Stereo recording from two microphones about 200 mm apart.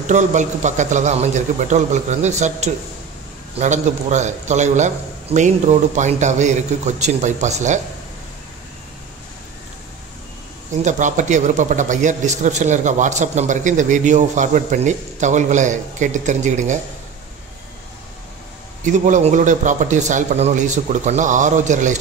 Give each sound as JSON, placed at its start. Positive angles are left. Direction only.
{"t": 0.0, "sound": "a man's voice", "side_deg": -35}
{"t": 10.8, "sound": "a man's voice", "side_deg": -40}
{"t": 18.9, "sound": "a man's voice", "side_deg": -40}